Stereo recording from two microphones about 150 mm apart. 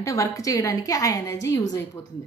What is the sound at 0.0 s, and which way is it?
A woman's voice, 20° left (ahead or behind).